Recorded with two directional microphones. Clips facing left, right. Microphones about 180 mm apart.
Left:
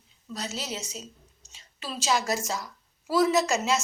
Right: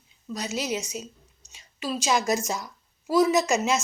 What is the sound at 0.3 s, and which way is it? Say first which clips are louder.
A woman's voice: right 5 dB; 15° right (ahead or behind).